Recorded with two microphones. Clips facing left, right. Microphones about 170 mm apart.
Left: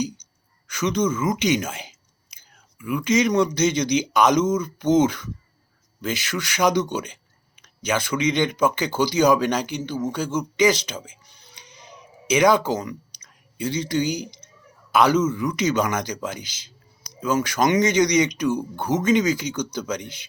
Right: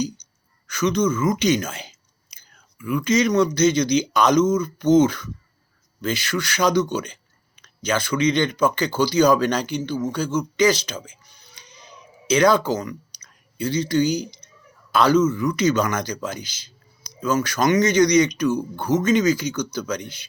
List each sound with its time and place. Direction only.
0.7 s speech: 20° left (ahead or behind)
7.6 s a sound: 20° left (ahead or behind)
8.3 s speech: 20° left (ahead or behind)